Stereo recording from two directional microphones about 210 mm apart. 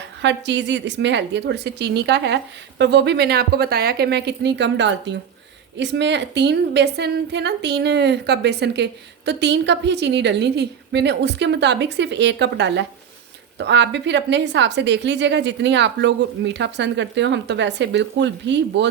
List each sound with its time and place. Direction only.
0.2 s a woman's voice: 55° right (ahead or behind)